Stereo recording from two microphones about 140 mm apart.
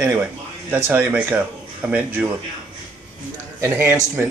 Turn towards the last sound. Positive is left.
turn(degrees=-15)  # may be behind; listen again after turning